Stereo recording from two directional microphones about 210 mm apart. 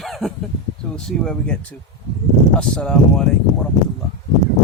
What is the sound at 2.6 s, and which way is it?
Speech, 5° left (ahead or behind).